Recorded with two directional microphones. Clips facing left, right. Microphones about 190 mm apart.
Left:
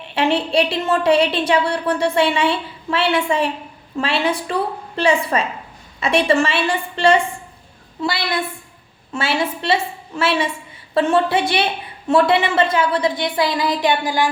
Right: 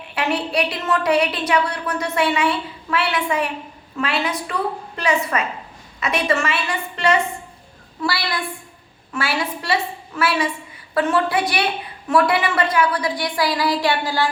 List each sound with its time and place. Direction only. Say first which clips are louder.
0.1 s a woman's voice: left 4 dB; 25° left (ahead or behind)